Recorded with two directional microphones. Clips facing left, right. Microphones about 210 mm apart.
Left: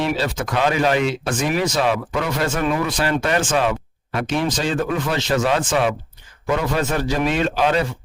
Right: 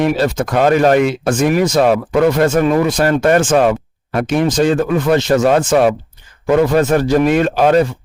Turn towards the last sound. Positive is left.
turn(degrees=-50)  # may be behind; listen again after turning